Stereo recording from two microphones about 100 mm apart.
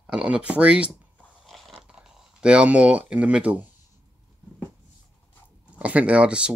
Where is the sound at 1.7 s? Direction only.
10° right (ahead or behind).